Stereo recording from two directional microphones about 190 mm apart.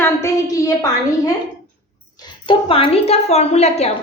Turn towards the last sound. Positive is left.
turn(degrees=35)  # may be behind; listen again after turning